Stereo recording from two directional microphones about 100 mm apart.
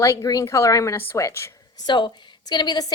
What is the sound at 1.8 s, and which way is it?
A woman's voice, 50° left (ahead or behind).